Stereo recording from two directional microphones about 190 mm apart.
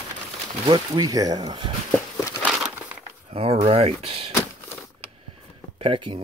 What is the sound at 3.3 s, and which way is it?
Speech, 30° right (ahead or behind).